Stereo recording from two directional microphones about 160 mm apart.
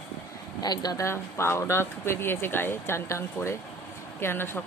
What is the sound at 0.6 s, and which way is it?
Speech, 25° left (ahead or behind).